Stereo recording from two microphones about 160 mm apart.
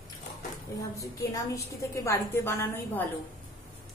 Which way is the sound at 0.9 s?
20° left (ahead or behind).